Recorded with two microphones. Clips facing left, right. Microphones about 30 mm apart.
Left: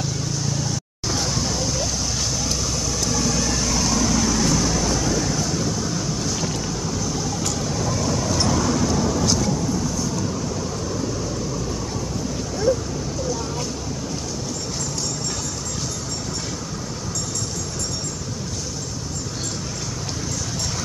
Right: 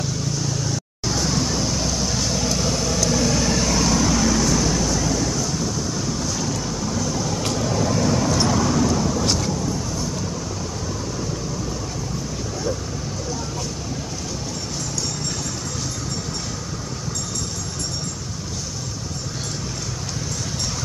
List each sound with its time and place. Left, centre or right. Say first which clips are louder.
0.7 s vehicle: right 1 dB; centre
2.3 s vehicle: right 3 dB; right; by 5.6 s centre
7.0 s a sound: right 2 dB; centre
7.5 s vehicle: right 3 dB; centre